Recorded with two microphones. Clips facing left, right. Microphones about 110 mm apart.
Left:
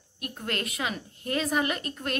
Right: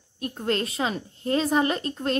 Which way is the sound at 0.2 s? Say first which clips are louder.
Right 7 dB; 30° right (ahead or behind).